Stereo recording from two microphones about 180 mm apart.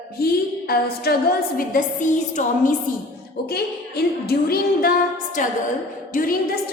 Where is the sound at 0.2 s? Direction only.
60° left (ahead or behind).